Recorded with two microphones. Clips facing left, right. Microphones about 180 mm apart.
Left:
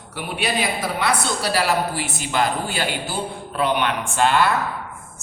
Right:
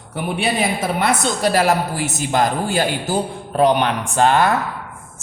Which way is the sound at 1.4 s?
45° right (ahead or behind).